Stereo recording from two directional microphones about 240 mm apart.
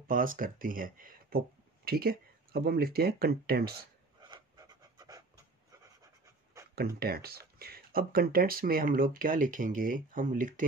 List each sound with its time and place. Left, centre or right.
0.1 s speech: right
4.2 s a sound: centre
6.7 s speech: right